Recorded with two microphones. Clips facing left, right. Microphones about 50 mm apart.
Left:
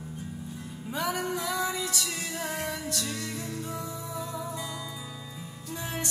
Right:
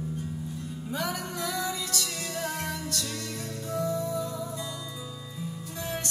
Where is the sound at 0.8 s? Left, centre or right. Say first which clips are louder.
Left 3 dB; left.